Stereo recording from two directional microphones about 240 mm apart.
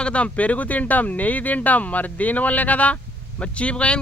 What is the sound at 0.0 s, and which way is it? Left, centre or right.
Speech, centre.